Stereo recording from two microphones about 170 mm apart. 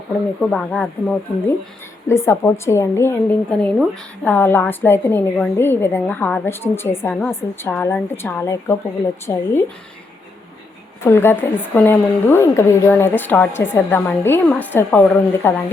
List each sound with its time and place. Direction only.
0.5 s a woman's voice: 5° left (ahead or behind)
11.0 s a woman's voice: 15° left (ahead or behind)